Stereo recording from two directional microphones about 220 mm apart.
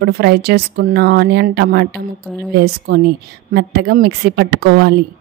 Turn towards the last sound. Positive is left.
turn(degrees=-50)  # may be behind; listen again after turning